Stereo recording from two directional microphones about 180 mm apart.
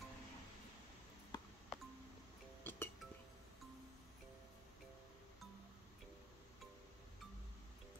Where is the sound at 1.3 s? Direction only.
20° left (ahead or behind).